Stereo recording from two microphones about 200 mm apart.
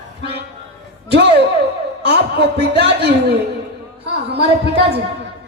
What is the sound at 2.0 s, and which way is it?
Music, 55° right (ahead or behind).